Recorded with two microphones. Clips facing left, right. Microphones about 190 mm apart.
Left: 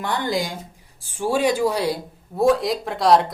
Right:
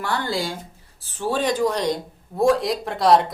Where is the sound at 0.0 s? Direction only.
20° left (ahead or behind).